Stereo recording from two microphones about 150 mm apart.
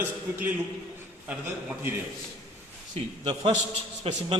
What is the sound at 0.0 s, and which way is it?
Speech, 15° right (ahead or behind).